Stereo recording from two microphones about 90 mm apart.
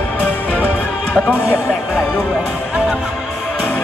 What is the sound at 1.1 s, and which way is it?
Speech, 20° left (ahead or behind).